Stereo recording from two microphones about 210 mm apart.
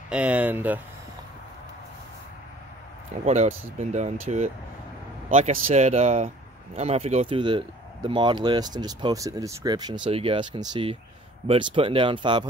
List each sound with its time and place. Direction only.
0.1 s speech: 5° right (ahead or behind)
3.3 s speech: 30° right (ahead or behind)